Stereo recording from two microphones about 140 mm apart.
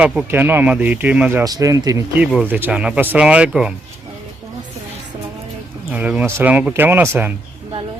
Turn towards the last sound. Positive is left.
turn(degrees=-15)  # may be behind; listen again after turning